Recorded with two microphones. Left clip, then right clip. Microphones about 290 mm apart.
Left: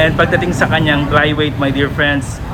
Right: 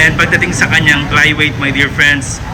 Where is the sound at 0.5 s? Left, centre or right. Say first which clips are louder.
Right 3 dB; left.